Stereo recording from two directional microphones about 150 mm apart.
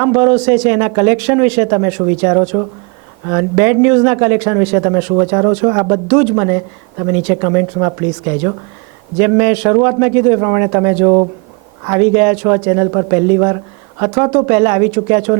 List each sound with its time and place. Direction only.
0.0 s a man's voice: 20° right (ahead or behind)